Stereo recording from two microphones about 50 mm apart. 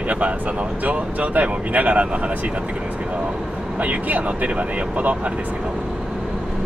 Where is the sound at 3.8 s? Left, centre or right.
Right.